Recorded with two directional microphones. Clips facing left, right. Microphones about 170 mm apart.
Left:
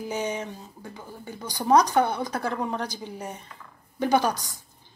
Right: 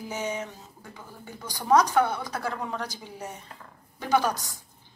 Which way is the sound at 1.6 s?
20° left (ahead or behind).